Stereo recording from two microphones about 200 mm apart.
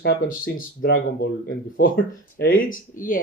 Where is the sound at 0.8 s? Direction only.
60° left (ahead or behind).